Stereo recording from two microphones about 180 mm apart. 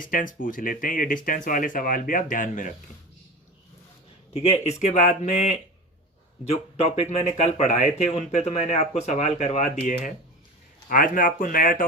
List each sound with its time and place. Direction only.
0.0 s speech: 50° left (ahead or behind)
4.4 s speech: 35° left (ahead or behind); by 11.9 s 50° left (ahead or behind)